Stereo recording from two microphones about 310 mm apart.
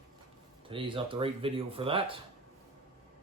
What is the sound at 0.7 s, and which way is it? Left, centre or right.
Speech, centre.